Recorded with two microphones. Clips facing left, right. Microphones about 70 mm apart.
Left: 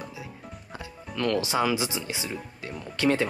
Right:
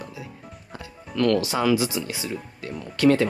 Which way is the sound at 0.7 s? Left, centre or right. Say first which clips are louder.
Right 6 dB; centre.